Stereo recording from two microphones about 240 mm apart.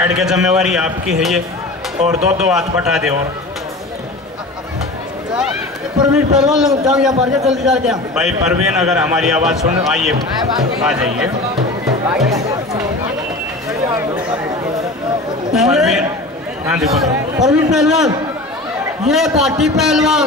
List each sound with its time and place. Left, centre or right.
0.0 s a man's voice: centre
6.1 s a man's voice: centre
15.5 s a man's voice: centre